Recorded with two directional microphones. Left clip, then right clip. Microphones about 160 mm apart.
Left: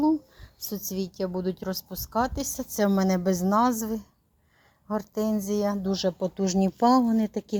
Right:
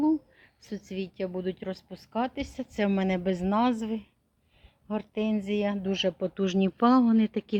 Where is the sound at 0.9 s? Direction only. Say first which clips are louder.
Left 2 dB; 20° left (ahead or behind).